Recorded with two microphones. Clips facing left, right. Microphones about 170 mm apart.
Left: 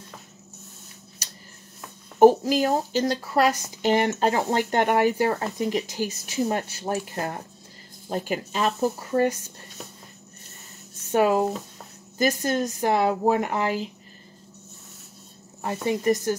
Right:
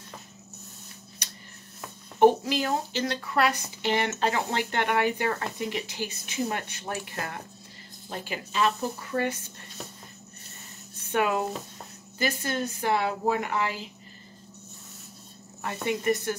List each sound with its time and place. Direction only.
2.1 s speech: 40° left (ahead or behind)
11.1 s speech: 35° left (ahead or behind)
15.6 s speech: 35° left (ahead or behind)